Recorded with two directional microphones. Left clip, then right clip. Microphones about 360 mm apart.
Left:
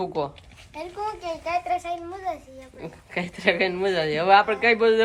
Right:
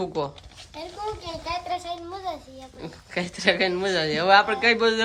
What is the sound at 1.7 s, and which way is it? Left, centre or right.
A child's voice, centre.